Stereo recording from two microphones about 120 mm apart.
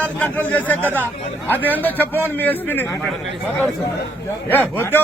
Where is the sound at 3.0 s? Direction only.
5° left (ahead or behind).